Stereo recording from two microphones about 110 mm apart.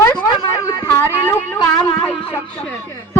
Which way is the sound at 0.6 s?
30° left (ahead or behind).